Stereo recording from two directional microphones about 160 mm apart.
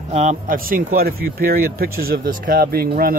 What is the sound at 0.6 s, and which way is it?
Speech, 65° right (ahead or behind).